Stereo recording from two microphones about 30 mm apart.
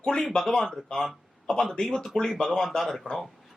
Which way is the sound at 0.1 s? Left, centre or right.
Left.